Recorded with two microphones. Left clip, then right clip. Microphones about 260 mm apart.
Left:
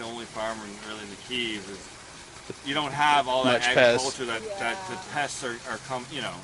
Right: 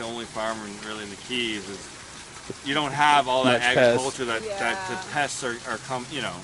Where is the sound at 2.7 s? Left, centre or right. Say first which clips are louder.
Right 3 dB; centre.